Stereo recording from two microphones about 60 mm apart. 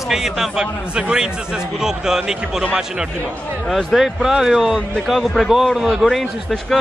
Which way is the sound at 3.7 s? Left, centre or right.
Centre.